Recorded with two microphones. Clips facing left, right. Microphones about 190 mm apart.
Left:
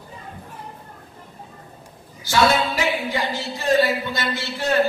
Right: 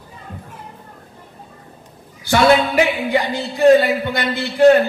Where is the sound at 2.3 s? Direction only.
60° right (ahead or behind).